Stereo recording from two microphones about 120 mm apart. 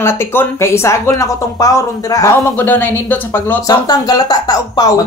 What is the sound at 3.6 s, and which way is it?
Speech, 35° left (ahead or behind).